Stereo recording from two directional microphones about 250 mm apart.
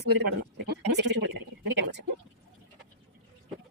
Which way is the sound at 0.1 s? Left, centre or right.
Right.